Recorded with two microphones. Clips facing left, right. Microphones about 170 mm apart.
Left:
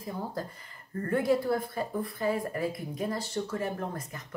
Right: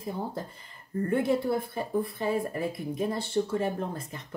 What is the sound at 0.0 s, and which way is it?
Speech, 25° right (ahead or behind).